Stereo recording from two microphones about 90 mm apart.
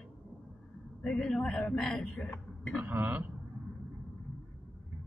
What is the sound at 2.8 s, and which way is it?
Speech, 20° right (ahead or behind).